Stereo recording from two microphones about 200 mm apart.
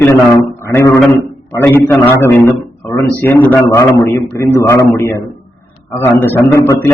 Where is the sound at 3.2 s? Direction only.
10° left (ahead or behind).